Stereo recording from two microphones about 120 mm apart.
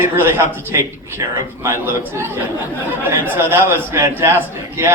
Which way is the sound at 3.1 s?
20° right (ahead or behind).